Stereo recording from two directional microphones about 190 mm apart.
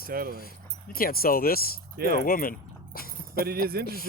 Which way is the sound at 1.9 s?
50° right (ahead or behind).